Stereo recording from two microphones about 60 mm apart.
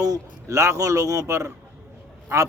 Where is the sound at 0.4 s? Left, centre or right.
Right.